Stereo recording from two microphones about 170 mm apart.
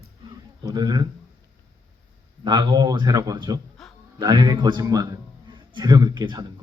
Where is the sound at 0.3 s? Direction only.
25° right (ahead or behind).